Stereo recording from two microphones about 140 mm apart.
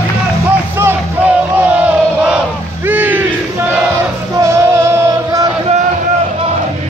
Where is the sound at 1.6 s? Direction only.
10° right (ahead or behind).